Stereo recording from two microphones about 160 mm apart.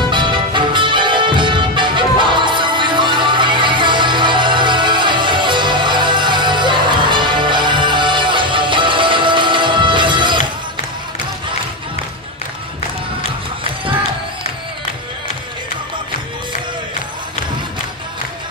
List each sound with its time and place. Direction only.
0.1 s music: 30° right (ahead or behind)